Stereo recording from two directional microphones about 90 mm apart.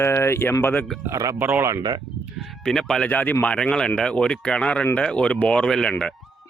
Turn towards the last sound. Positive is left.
turn(degrees=5)  # may be behind; listen again after turning